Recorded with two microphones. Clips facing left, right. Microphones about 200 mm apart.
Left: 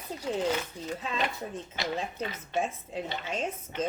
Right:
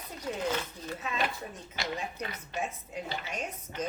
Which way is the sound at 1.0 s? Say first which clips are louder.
Even; 30° left (ahead or behind).